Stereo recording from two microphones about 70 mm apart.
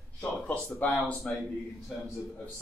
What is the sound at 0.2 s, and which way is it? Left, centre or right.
Speech, left.